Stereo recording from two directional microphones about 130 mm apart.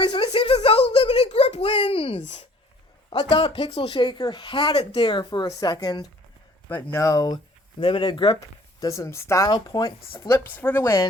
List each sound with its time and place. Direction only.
0.0 s a sound: 45° left (ahead or behind)
3.1 s speech: 45° left (ahead or behind)
4.7 s speech: 45° left (ahead or behind); by 6.1 s 30° left (ahead or behind)
6.7 s speech: 15° left (ahead or behind)
7.8 s speech: 40° left (ahead or behind)
8.8 s speech: 25° left (ahead or behind)
9.5 s speech: 30° left (ahead or behind)